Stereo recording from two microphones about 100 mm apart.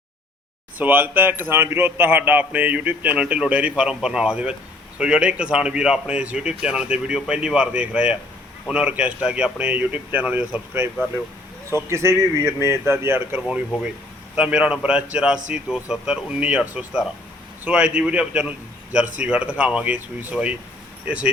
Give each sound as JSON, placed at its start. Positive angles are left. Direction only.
{"t": 0.8, "sound": "a man's voice", "side_deg": -20}
{"t": 11.7, "sound": "speech", "side_deg": -25}
{"t": 14.3, "sound": "a man's voice", "side_deg": -10}